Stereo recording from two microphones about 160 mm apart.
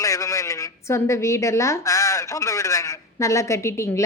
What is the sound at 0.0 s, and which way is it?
A woman's voice, 20° left (ahead or behind).